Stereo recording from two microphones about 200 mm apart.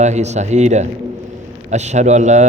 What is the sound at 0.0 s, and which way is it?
A man's voice, 35° right (ahead or behind).